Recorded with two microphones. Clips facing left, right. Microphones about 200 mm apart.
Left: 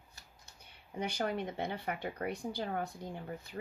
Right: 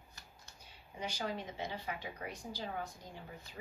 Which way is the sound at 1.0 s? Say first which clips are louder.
Left 5 dB; 60° left (ahead or behind).